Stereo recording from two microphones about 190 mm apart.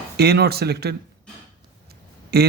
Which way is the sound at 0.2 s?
55° right (ahead or behind).